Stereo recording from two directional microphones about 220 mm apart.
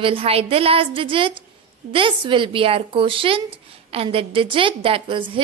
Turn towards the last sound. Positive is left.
turn(degrees=-20)  # may be behind; listen again after turning